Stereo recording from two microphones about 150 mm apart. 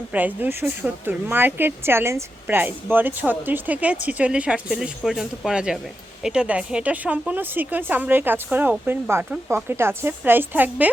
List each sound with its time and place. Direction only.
0.1 s speech: 10° right (ahead or behind)